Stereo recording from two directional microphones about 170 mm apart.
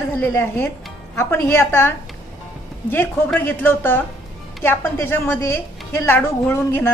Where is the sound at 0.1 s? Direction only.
10° left (ahead or behind).